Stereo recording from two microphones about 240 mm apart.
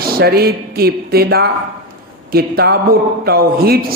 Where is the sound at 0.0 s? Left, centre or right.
Right.